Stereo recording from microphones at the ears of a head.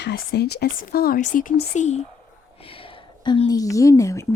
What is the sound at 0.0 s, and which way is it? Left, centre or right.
Speech, left.